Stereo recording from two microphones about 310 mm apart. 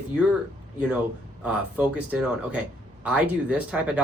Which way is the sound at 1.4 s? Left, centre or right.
Centre.